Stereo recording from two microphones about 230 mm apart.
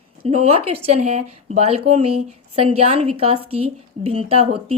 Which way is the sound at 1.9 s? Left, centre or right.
Right.